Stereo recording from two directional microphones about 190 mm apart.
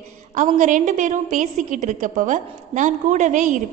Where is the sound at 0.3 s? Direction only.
40° right (ahead or behind).